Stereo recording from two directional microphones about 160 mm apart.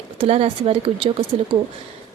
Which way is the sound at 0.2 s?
35° right (ahead or behind).